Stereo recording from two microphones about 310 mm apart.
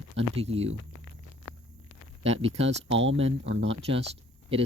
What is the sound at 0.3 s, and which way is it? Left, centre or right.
Speech, centre.